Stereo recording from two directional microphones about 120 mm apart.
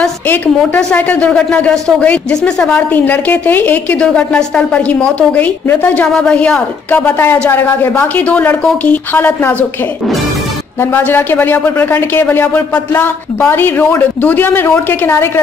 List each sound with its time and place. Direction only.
0.6 s speech: 10° left (ahead or behind)
10.8 s speech: 15° left (ahead or behind)